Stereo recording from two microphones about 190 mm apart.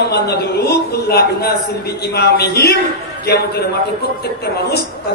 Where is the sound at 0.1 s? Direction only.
60° left (ahead or behind).